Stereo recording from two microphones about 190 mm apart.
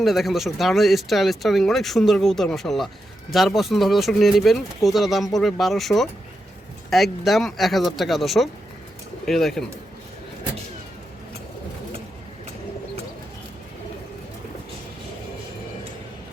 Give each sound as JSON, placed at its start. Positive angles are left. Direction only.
{"t": 0.0, "sound": "speech", "side_deg": 0}